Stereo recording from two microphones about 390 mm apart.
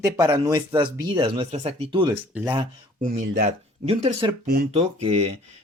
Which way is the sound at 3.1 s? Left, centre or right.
Right.